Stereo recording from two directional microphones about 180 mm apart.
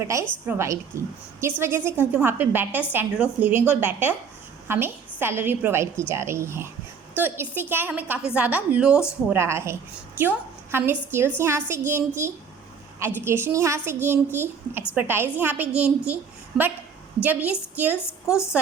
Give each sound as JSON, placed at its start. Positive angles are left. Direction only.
{"t": 0.1, "sound": "a woman's voice", "side_deg": -15}